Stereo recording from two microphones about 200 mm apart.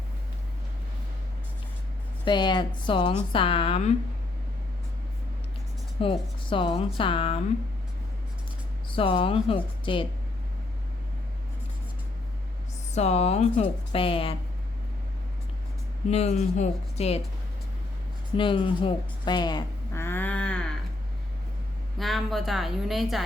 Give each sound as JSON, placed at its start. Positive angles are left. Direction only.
{"t": 2.2, "sound": "speech", "side_deg": 20}
{"t": 6.0, "sound": "speech", "side_deg": 25}
{"t": 8.9, "sound": "speech", "side_deg": 25}
{"t": 12.9, "sound": "a woman's voice", "side_deg": 35}
{"t": 16.0, "sound": "a woman's voice", "side_deg": 30}
{"t": 18.3, "sound": "speech", "side_deg": 25}
{"t": 21.9, "sound": "a woman's voice", "side_deg": 0}